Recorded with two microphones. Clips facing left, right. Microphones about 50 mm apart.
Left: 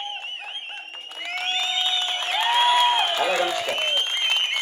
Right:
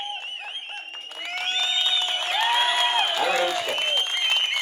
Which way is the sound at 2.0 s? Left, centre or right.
Centre.